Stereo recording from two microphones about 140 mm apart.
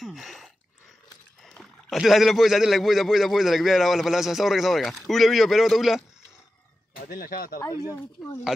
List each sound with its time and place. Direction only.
0.0 s a sound: centre (ahead or behind)
1.4 s a man's voice: centre (ahead or behind)
7.0 s speech: 90° left
7.8 s speech: 20° left (ahead or behind)